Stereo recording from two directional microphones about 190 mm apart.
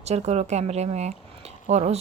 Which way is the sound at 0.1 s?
35° right (ahead or behind).